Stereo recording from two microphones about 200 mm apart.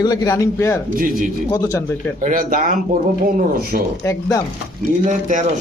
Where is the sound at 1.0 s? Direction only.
45° right (ahead or behind).